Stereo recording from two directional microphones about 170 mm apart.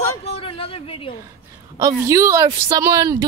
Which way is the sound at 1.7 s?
20° right (ahead or behind).